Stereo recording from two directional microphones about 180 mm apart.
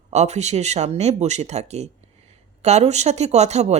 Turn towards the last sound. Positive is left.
turn(degrees=-40)  # may be behind; listen again after turning